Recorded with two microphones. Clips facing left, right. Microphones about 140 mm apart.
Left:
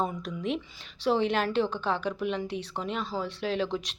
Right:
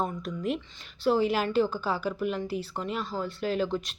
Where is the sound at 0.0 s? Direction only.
Centre (ahead or behind).